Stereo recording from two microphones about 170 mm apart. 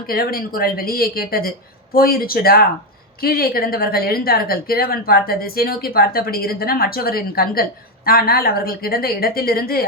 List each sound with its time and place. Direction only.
0.1 s speech: 60° left (ahead or behind)